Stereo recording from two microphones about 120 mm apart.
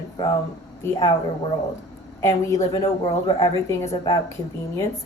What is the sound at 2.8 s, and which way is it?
Speech, 45° left (ahead or behind).